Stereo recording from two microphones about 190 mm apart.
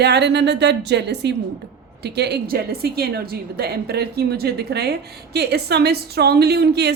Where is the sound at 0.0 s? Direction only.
60° right (ahead or behind).